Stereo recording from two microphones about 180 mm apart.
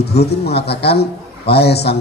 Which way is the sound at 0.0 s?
65° left (ahead or behind).